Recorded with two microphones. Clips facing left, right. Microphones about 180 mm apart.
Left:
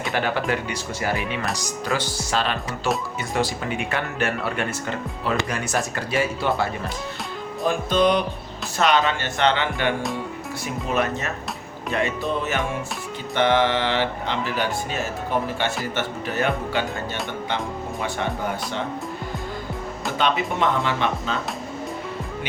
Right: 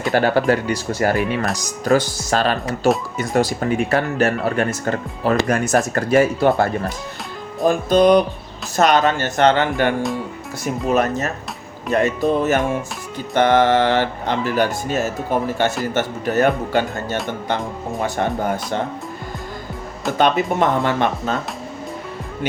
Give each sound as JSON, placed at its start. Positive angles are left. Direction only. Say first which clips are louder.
{"t": 0.1, "sound": "speech", "louder": "right 8 dB", "side_deg": -40}
{"t": 20.1, "sound": "speech", "louder": "right 6 dB", "side_deg": -45}